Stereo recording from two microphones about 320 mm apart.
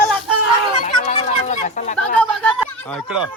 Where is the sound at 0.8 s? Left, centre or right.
Left.